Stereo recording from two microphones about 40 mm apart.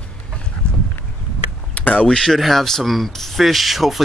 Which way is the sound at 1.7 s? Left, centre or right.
Left.